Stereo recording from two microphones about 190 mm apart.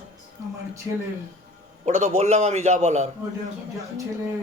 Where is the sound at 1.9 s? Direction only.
35° right (ahead or behind).